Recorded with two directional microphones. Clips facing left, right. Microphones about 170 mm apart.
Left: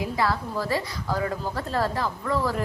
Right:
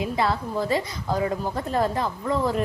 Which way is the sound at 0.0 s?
20° right (ahead or behind).